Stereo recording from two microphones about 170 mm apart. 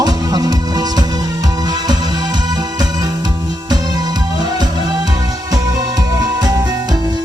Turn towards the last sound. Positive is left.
turn(degrees=-25)  # may be behind; listen again after turning